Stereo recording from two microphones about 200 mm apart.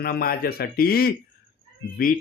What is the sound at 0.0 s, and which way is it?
Speech, 50° left (ahead or behind).